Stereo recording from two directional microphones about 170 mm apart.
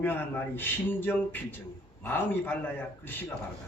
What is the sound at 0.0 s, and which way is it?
A man's voice, 10° left (ahead or behind).